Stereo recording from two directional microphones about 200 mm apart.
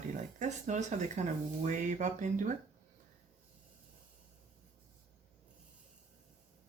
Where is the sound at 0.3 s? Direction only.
35° right (ahead or behind).